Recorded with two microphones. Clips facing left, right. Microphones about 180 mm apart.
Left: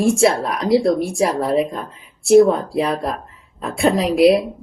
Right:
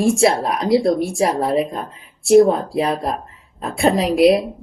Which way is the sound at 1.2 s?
45° right (ahead or behind).